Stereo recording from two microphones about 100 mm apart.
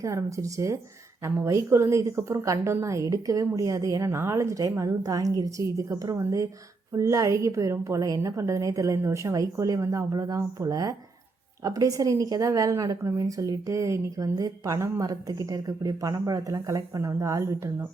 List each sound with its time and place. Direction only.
0.0 s speech: 30° right (ahead or behind)